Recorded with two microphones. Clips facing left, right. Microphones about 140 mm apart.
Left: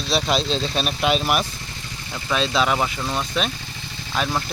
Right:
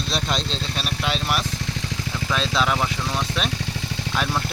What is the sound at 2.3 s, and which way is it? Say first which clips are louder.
Speech: left 3 dB; centre (ahead or behind).